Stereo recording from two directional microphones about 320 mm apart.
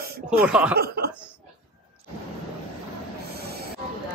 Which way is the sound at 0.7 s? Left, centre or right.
Right.